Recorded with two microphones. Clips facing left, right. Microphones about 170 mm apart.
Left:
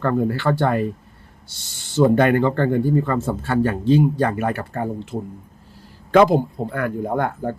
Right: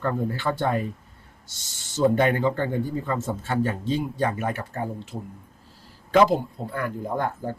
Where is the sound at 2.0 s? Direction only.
65° left (ahead or behind).